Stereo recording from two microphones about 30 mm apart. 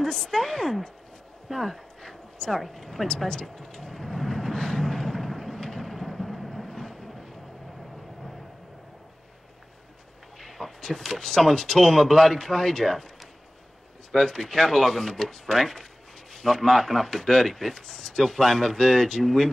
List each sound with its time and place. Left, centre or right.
0.0 s speech: centre
1.5 s a sound: centre
2.3 s a woman's voice: centre
2.6 s speech: centre
3.1 s speech: centre
3.4 s vehicle: centre
5.8 s a sound: centre
10.6 s artillery fire: centre
11.1 s speech: centre
14.1 s speech: centre